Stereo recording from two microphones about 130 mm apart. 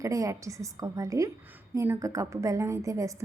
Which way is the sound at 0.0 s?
25° right (ahead or behind).